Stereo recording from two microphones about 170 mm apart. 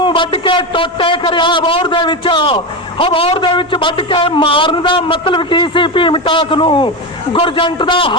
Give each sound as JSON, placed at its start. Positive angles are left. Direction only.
{"t": 0.0, "sound": "a man's voice", "side_deg": 30}